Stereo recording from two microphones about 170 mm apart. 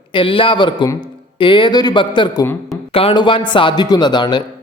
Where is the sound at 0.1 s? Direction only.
30° left (ahead or behind).